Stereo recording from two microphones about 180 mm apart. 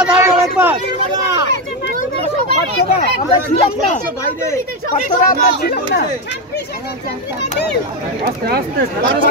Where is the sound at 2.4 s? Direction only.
45° left (ahead or behind).